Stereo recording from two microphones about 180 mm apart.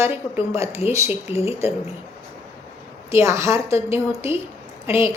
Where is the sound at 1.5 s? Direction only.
15° right (ahead or behind).